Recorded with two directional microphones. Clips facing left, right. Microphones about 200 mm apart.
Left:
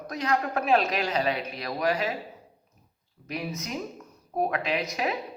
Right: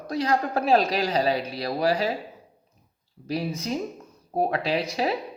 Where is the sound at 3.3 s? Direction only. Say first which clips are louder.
Right 5 dB; 30° right (ahead or behind).